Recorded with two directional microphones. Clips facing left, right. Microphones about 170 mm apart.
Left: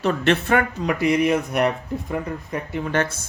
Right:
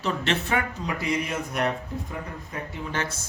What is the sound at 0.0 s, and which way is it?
Speech, 55° left (ahead or behind).